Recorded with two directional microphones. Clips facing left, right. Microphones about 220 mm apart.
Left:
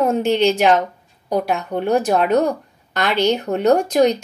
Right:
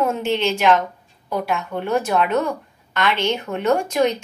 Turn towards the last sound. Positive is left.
turn(degrees=35)  # may be behind; listen again after turning